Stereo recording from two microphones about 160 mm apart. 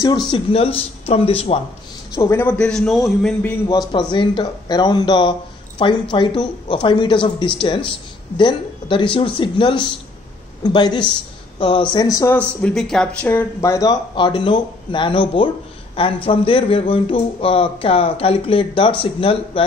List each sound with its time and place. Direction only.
0.3 s speech: 35° left (ahead or behind)
2.1 s a man's voice: 15° left (ahead or behind)
3.9 s speech: 30° left (ahead or behind)
12.4 s speech: 5° left (ahead or behind); by 19.6 s 35° left (ahead or behind)